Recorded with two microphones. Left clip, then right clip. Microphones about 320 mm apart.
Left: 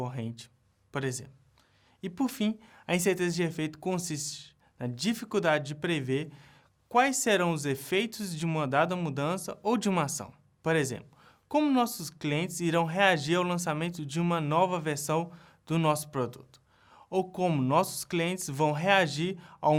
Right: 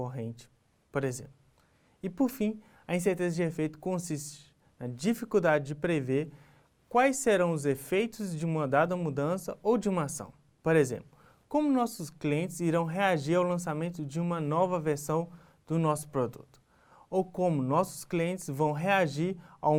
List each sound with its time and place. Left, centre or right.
0.0 s a man's voice: left
2.5 s speech: left
4.0 s speech: left
8.6 s speech: left
11.4 s a woman's voice: left
11.8 s speech: left
14.2 s speech: left
15.2 s speech: left
15.9 s speech: left
16.9 s a sound: left
17.4 s speech: left
17.7 s speech: left